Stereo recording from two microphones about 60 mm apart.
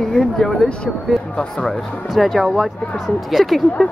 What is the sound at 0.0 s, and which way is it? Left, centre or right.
Speech, centre.